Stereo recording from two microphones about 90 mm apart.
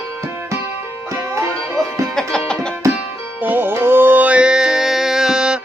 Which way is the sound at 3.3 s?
20° right (ahead or behind).